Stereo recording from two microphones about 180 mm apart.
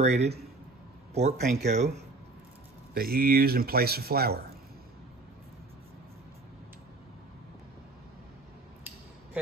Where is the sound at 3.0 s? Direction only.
55° right (ahead or behind).